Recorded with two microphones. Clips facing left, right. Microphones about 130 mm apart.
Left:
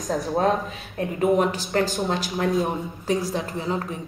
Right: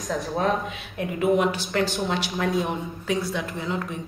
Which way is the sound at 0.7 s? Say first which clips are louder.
Left 1 dB; 40° left (ahead or behind).